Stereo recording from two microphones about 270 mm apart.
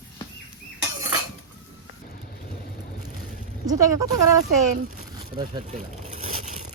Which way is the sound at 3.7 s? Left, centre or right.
Centre.